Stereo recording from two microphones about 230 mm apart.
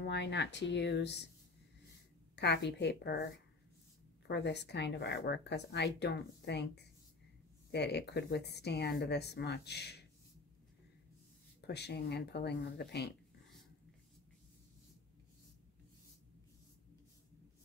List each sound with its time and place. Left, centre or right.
0.1 s speech: left
2.3 s speech: left
4.3 s speech: left
11.6 s speech: left